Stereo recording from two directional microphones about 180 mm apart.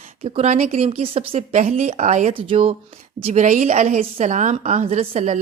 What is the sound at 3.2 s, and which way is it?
Speech, 40° right (ahead or behind).